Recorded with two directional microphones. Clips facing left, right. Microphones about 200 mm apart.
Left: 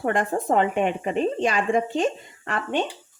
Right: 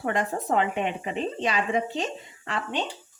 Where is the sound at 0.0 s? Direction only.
50° left (ahead or behind).